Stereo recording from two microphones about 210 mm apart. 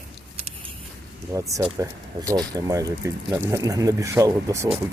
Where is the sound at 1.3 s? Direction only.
15° right (ahead or behind).